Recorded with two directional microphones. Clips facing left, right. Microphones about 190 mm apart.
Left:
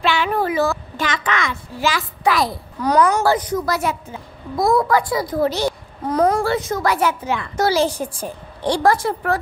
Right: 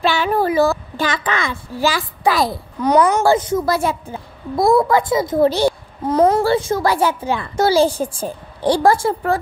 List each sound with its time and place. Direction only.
0.0 s a child's voice: 40° right (ahead or behind)